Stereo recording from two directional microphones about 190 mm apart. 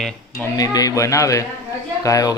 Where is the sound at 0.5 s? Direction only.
20° left (ahead or behind).